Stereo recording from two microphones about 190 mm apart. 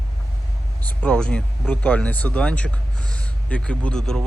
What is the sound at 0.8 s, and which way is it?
Speech, 5° left (ahead or behind).